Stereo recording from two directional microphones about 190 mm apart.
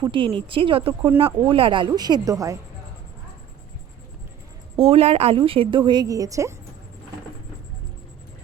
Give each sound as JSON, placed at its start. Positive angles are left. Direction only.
{"t": 0.0, "sound": "a woman's voice", "side_deg": -25}
{"t": 4.8, "sound": "a woman's voice", "side_deg": -35}